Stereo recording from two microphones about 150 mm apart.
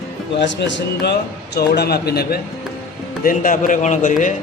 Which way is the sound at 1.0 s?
90° left.